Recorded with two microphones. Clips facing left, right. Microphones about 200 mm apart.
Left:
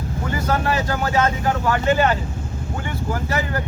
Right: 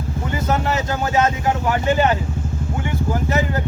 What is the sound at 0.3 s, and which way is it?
Speech, 20° right (ahead or behind).